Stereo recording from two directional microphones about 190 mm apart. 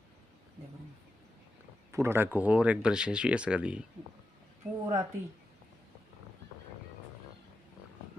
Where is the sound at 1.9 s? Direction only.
15° right (ahead or behind).